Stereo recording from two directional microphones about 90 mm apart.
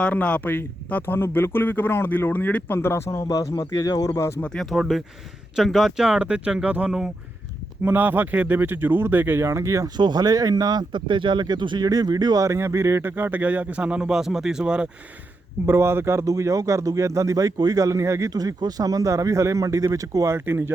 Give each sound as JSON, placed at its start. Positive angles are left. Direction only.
{"t": 0.0, "sound": "a man's voice", "side_deg": 15}
{"t": 4.4, "sound": "speech", "side_deg": 10}
{"t": 7.9, "sound": "speech", "side_deg": -20}
{"t": 10.0, "sound": "speech", "side_deg": -50}
{"t": 11.9, "sound": "speech", "side_deg": -45}
{"t": 15.6, "sound": "speech", "side_deg": -25}